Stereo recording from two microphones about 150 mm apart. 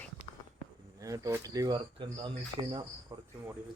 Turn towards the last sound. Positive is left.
turn(degrees=-30)  # may be behind; listen again after turning